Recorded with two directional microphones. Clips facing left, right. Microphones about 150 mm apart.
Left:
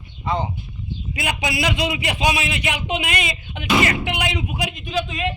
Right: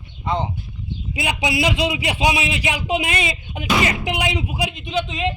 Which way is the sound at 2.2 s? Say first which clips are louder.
Right 1 dB; 15° right (ahead or behind).